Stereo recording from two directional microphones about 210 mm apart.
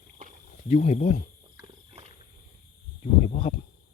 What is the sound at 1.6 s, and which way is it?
Wild animals, 30° right (ahead or behind).